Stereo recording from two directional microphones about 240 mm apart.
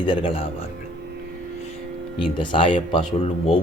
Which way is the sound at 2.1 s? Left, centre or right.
Left.